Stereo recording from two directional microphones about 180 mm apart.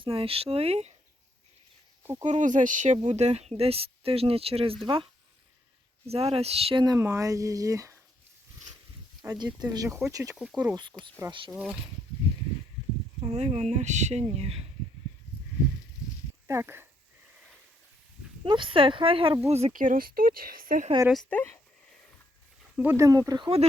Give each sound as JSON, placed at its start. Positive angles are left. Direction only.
{"t": 0.0, "sound": "speech", "side_deg": -30}
{"t": 2.2, "sound": "speech", "side_deg": -45}
{"t": 6.1, "sound": "speech", "side_deg": -35}
{"t": 9.2, "sound": "speech", "side_deg": -15}
{"t": 10.3, "sound": "speech", "side_deg": -5}
{"t": 11.3, "sound": "speech", "side_deg": -25}
{"t": 11.5, "sound": "speech", "side_deg": -5}
{"t": 13.2, "sound": "speech", "side_deg": -35}
{"t": 16.5, "sound": "speech", "side_deg": -15}
{"t": 18.4, "sound": "speech", "side_deg": -25}
{"t": 21.1, "sound": "speech", "side_deg": 5}
{"t": 22.8, "sound": "speech", "side_deg": -15}